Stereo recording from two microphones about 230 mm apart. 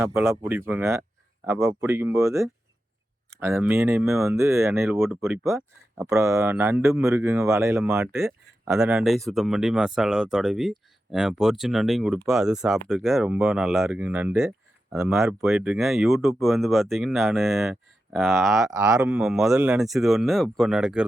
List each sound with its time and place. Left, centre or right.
0.0 s speech: centre
18.6 s speech: centre
18.9 s speech: centre